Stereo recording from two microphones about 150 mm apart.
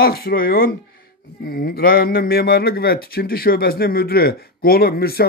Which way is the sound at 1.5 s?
85° left.